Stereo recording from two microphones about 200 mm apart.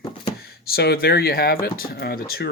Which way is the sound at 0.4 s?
50° left (ahead or behind).